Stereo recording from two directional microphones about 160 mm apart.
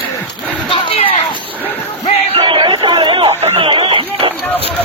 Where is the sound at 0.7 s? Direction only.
35° left (ahead or behind).